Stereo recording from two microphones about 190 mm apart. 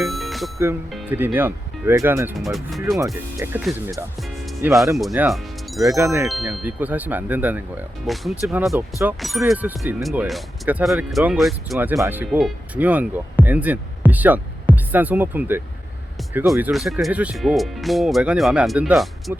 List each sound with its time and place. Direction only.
0.0 s music: centre (ahead or behind)
0.9 s speech: 10° right (ahead or behind)
2.4 s speech: centre (ahead or behind)
3.3 s speech: 10° right (ahead or behind)
4.6 s speech: centre (ahead or behind)
6.2 s speech: 5° right (ahead or behind)
8.7 s speech: 15° right (ahead or behind)